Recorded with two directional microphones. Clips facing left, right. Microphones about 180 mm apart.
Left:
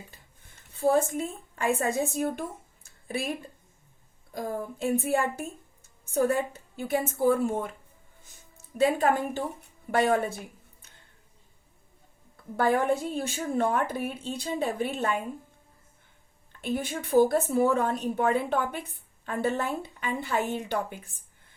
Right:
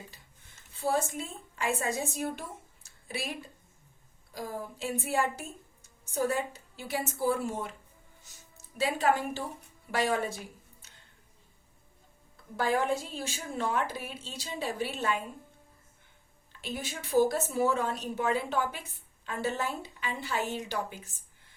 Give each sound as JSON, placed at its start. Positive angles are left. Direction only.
{"t": 0.8, "sound": "a woman's voice", "side_deg": 50}
{"t": 2.8, "sound": "a sound", "side_deg": 50}
{"t": 4.4, "sound": "a woman's voice", "side_deg": 55}
{"t": 8.8, "sound": "a woman's voice", "side_deg": 50}
{"t": 12.5, "sound": "a woman's voice", "side_deg": 55}
{"t": 16.5, "sound": "a woman's voice", "side_deg": 55}